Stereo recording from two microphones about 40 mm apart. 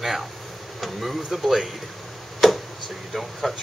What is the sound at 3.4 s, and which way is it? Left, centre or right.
Speech, centre.